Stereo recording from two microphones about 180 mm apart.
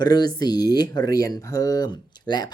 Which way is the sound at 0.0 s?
20° left (ahead or behind).